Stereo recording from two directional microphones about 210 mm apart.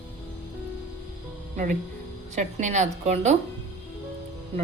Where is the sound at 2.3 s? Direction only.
35° right (ahead or behind).